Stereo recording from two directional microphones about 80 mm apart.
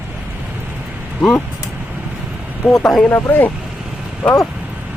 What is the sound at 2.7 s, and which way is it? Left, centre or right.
Speech, centre.